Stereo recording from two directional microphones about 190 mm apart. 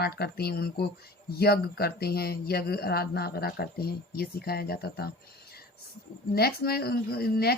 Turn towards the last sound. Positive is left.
turn(degrees=55)  # may be behind; listen again after turning